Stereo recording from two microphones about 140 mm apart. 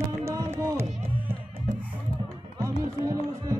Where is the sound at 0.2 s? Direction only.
20° right (ahead or behind).